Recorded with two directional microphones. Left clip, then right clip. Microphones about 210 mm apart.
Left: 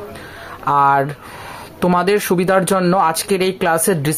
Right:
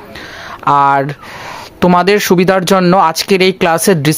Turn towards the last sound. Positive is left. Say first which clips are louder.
# right 5 dB
turn(degrees=-40)  # may be behind; listen again after turning